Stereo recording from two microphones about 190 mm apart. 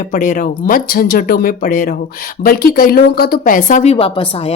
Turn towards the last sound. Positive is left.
turn(degrees=30)  # may be behind; listen again after turning